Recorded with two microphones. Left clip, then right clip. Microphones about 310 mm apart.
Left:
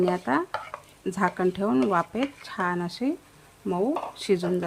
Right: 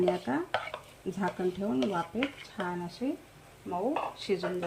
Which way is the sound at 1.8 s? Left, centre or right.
Centre.